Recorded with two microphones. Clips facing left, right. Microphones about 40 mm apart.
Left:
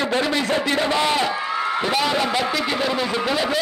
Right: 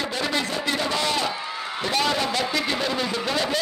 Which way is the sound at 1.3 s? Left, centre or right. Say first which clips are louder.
Left 8 dB; left.